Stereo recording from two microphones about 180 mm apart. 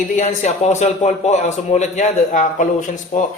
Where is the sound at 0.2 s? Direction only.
40° left (ahead or behind).